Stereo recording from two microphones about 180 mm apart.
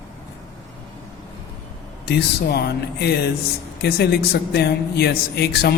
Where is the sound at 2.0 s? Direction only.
65° left (ahead or behind).